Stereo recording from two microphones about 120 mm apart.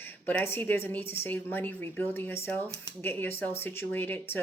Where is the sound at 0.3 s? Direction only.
15° left (ahead or behind).